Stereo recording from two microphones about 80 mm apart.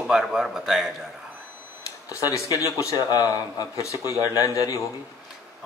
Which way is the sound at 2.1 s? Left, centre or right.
Left.